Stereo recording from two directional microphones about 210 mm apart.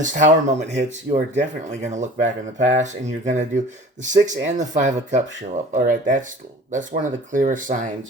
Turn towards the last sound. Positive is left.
turn(degrees=-35)  # may be behind; listen again after turning